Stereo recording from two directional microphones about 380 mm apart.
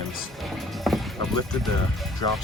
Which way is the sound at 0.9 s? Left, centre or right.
Centre.